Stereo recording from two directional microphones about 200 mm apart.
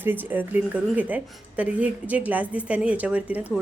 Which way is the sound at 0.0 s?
10° right (ahead or behind).